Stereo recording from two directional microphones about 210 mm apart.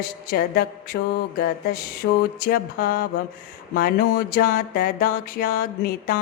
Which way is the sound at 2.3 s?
45° left (ahead or behind).